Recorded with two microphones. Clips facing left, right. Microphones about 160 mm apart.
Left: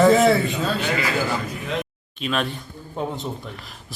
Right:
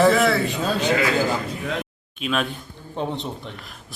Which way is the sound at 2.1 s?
Centre (ahead or behind).